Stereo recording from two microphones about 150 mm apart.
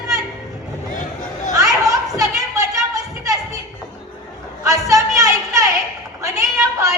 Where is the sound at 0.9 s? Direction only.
60° left (ahead or behind).